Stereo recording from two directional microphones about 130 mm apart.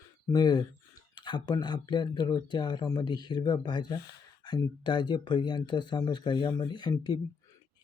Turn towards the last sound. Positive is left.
turn(degrees=35)  # may be behind; listen again after turning